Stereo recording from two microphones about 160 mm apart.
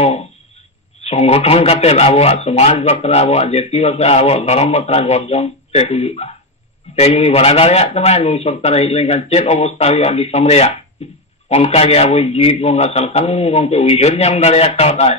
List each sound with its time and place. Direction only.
1.0 s a man's voice: 40° left (ahead or behind)